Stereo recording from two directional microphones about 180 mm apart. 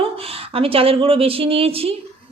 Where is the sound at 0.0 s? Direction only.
30° right (ahead or behind).